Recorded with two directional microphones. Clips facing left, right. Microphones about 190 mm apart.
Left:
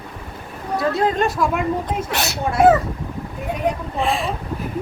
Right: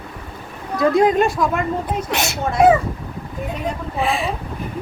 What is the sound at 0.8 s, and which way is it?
Speech, 15° right (ahead or behind).